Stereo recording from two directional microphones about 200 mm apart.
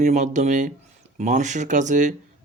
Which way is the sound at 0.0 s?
35° right (ahead or behind).